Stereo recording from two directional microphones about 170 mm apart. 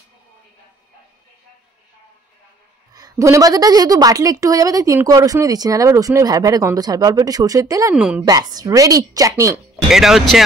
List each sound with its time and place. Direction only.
2.9 s a woman's voice: 20° right (ahead or behind)
7.9 s speech: 5° right (ahead or behind)
8.3 s a woman's voice: 20° right (ahead or behind)
9.8 s speech: centre (ahead or behind)